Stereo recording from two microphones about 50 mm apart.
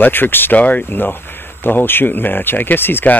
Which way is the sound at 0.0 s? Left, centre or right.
Left.